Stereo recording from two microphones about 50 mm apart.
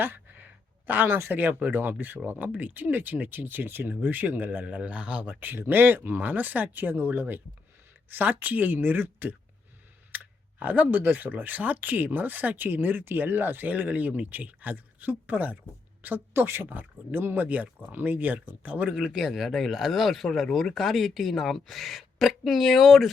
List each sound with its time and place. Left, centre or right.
0.0 s a sound: right
1.3 s speech: right
4.6 s speech: right
10.1 s clicking: right
10.6 s speech: right
16.3 s speech: right
16.6 s speech: right
19.0 s speech: centre
19.3 s speech: centre